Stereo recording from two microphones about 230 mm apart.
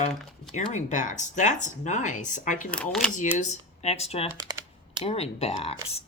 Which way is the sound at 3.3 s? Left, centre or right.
Left.